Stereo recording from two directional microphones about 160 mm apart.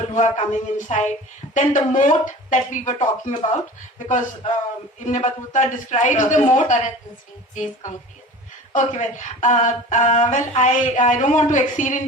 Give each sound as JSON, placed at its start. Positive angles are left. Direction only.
{"t": 0.1, "sound": "speech", "side_deg": 50}